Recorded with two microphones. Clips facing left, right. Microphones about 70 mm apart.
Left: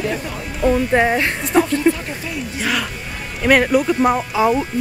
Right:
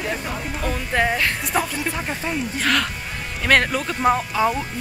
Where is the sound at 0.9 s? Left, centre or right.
Centre.